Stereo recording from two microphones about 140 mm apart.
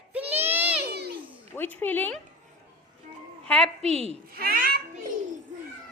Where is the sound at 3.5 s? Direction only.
5° left (ahead or behind).